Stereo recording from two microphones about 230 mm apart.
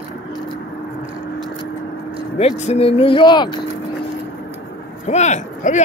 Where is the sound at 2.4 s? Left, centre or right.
Left.